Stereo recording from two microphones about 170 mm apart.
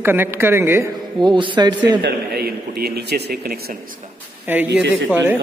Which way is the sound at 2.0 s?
65° right (ahead or behind).